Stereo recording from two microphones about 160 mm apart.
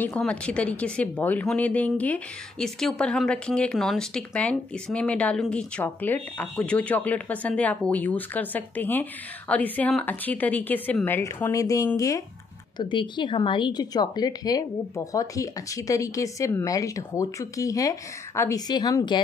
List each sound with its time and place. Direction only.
0.0 s a woman's voice: 10° left (ahead or behind); by 19.2 s 25° left (ahead or behind)